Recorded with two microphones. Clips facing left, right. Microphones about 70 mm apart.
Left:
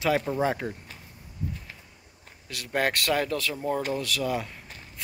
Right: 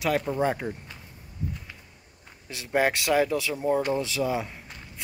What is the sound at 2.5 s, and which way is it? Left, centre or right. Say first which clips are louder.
A man's voice: right 3 dB; centre.